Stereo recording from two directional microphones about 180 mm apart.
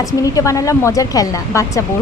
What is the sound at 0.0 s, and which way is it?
A woman's voice, 20° left (ahead or behind).